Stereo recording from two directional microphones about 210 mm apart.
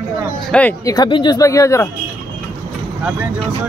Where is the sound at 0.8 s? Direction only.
20° left (ahead or behind).